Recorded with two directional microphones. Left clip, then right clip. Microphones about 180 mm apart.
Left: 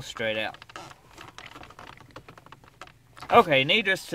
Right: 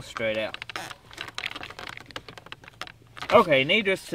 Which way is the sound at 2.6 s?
30° right (ahead or behind).